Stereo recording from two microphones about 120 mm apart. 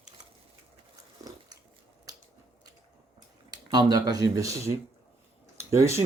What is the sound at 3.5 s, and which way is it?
Speech, 35° right (ahead or behind).